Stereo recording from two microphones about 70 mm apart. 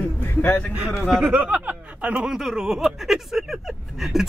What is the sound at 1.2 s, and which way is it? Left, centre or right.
Speech, centre.